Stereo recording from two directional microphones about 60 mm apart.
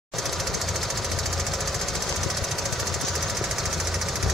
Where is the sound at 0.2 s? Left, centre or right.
Centre.